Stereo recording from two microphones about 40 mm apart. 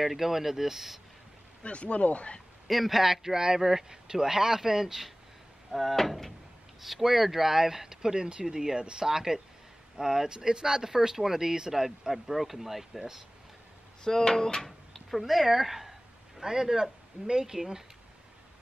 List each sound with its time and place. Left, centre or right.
0.0 s speech: centre
1.6 s speech: left
2.7 s speech: centre
14.0 s speech: centre
15.0 s speech: centre